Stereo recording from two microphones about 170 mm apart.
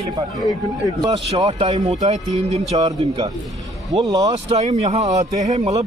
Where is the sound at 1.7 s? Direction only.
40° right (ahead or behind).